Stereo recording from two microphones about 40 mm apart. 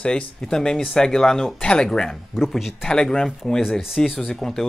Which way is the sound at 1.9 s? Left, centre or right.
Centre.